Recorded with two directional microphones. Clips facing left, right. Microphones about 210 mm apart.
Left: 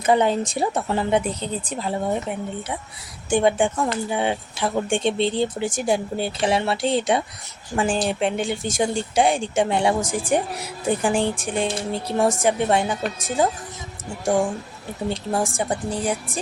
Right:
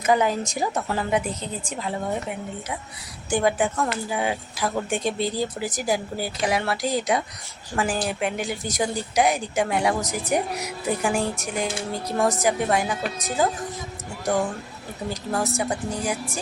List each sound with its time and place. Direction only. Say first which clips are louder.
0.0 s speech: left 2 dB; 30° left (ahead or behind)
3.2 s speech: left 3 dB; 25° left (ahead or behind)
15.1 s speech: left 1 dB; 30° left (ahead or behind)